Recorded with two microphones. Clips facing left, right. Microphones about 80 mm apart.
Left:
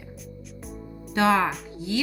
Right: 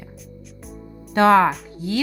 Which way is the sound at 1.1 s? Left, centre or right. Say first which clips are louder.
Right 7 dB; right.